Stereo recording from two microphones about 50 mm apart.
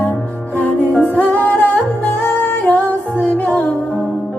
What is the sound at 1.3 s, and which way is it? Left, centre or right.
Music, left.